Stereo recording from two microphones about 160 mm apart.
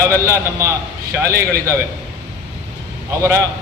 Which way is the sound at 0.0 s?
15° right (ahead or behind).